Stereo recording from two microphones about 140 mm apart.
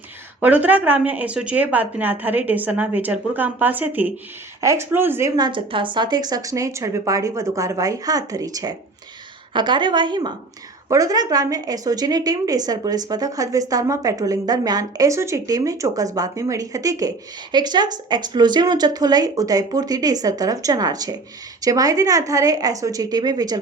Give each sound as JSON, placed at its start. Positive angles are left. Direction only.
{"t": 0.3, "sound": "speech", "side_deg": -10}
{"t": 5.4, "sound": "a woman's voice", "side_deg": -35}